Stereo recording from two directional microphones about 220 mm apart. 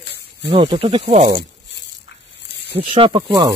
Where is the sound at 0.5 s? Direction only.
25° right (ahead or behind).